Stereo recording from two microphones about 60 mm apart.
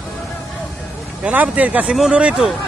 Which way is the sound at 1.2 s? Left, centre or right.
Right.